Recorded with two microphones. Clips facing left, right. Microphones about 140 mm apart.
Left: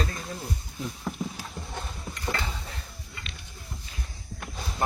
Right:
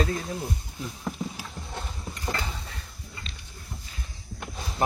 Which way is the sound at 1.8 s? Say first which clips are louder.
Even; 5° right (ahead or behind).